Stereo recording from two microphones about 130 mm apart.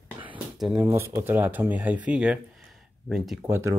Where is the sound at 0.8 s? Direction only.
20° right (ahead or behind); by 3.4 s centre (ahead or behind).